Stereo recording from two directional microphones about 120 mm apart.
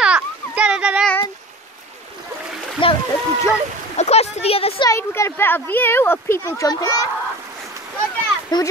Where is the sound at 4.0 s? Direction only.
60° left (ahead or behind).